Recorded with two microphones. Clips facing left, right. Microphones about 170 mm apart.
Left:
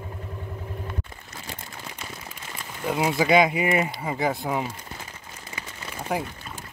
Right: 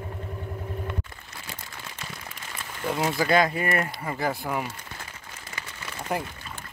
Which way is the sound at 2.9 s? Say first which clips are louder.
Left 3 dB; 10° left (ahead or behind).